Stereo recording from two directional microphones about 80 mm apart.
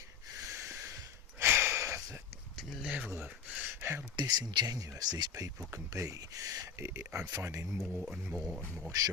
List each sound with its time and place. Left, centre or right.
0.3 s a sound: right
2.8 s a sound: centre; by 4.0 s right
4.2 s speech: right
6.7 s speech: right
7.8 s speech: centre
8.9 s speech: right